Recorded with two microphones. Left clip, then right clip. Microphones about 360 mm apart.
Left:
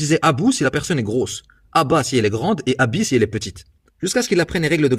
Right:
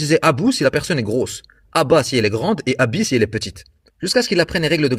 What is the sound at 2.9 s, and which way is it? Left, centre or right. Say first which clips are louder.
Speech: even; right.